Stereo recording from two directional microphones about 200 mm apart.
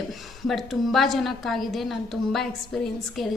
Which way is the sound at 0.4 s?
Centre (ahead or behind).